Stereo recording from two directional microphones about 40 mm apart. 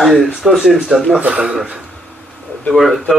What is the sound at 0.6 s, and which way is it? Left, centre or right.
Speech, centre.